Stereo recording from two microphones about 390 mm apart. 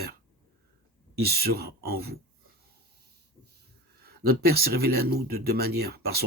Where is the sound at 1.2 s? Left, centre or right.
Right.